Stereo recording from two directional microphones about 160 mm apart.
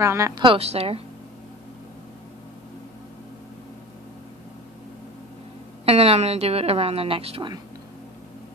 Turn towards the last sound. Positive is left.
turn(degrees=-35)  # may be behind; listen again after turning